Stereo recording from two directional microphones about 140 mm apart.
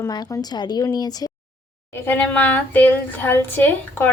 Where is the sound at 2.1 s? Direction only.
10° left (ahead or behind).